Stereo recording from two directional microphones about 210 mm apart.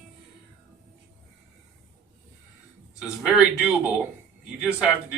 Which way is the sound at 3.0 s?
5° right (ahead or behind).